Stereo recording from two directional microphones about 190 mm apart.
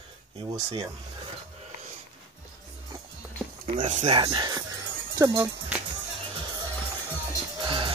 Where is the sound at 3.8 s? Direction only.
40° right (ahead or behind).